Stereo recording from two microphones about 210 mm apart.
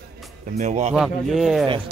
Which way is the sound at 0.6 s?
35° right (ahead or behind).